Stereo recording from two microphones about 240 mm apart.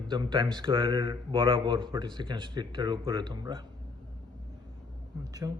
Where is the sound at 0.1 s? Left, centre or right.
Centre.